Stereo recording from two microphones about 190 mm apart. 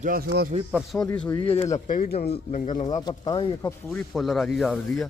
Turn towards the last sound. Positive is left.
turn(degrees=0)  # may be behind; listen again after turning